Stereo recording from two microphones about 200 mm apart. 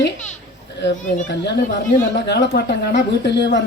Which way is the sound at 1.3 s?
60° left (ahead or behind).